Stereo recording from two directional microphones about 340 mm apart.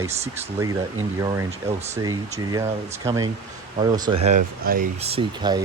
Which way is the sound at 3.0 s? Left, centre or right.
Centre.